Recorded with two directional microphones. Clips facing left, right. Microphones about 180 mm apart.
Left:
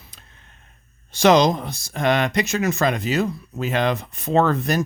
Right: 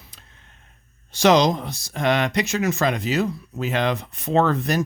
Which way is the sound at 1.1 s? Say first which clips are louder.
Left 1 dB; 55° left (ahead or behind).